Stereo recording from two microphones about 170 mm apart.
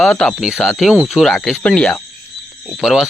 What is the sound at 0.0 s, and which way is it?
Speech, centre (ahead or behind).